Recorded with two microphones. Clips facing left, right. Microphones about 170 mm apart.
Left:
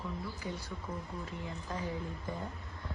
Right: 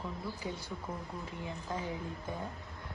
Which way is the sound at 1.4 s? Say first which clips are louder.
Right 2 dB; 20° right (ahead or behind).